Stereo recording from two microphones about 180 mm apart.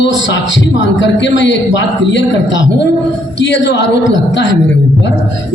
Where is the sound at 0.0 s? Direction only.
85° left.